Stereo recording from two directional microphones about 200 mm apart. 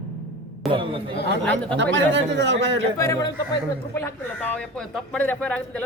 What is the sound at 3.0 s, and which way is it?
A man's voice, 15° left (ahead or behind).